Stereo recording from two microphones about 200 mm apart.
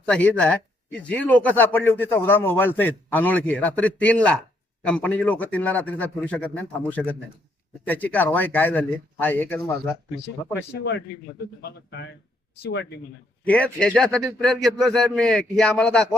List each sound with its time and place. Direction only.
0.0 s speech: 5° left (ahead or behind)
11.9 s speech: 55° left (ahead or behind)
13.4 s a man's voice: 5° left (ahead or behind)